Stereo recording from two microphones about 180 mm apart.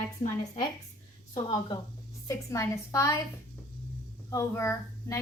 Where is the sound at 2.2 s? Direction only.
20° left (ahead or behind).